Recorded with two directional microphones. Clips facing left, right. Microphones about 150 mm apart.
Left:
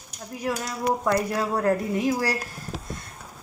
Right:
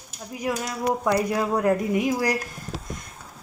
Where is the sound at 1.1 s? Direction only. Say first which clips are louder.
Right 3 dB; 15° right (ahead or behind).